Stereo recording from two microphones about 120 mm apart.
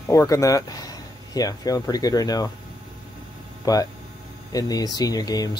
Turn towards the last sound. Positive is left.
turn(degrees=30)  # may be behind; listen again after turning